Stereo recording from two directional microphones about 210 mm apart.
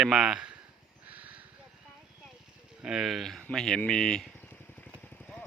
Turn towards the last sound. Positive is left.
turn(degrees=5)  # may be behind; listen again after turning